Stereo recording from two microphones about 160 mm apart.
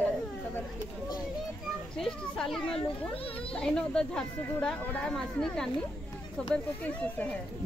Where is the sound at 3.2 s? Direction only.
35° left (ahead or behind).